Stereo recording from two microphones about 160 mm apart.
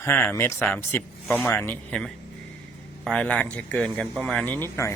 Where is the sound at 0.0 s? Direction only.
10° left (ahead or behind).